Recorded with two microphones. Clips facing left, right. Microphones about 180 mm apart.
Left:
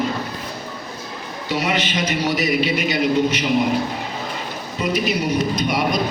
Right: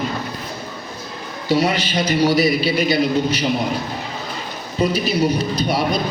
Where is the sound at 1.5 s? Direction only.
35° right (ahead or behind).